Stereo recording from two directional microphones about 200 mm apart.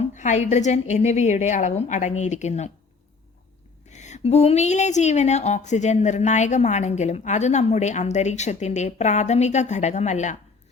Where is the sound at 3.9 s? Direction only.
35° left (ahead or behind).